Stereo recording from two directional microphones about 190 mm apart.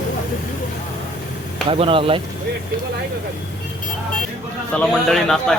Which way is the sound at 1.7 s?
30° right (ahead or behind).